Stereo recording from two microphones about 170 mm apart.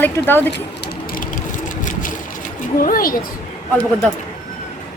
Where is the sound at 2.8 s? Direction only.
55° left (ahead or behind).